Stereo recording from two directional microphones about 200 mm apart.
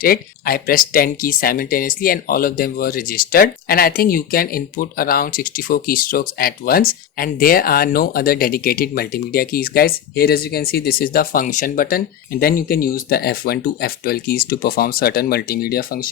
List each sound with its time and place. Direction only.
0.0 s speech: 45° left (ahead or behind)